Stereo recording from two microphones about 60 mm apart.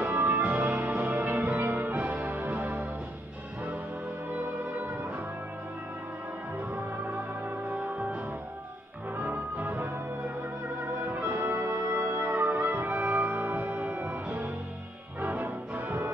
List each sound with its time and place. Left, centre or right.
0.1 s music: right
4.3 s music: right
7.1 s music: right
11.3 s music: right